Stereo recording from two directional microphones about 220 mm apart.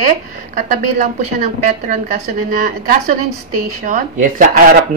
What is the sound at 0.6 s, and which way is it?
A woman's voice, 35° right (ahead or behind).